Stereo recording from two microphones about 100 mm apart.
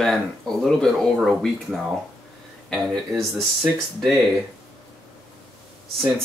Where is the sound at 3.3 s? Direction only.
Centre (ahead or behind).